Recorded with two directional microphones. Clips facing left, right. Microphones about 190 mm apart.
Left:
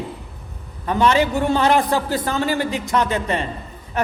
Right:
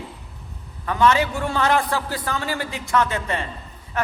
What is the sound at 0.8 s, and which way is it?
A man's voice, 20° left (ahead or behind).